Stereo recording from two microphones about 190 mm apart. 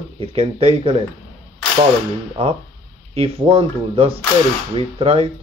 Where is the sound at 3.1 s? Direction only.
30° right (ahead or behind).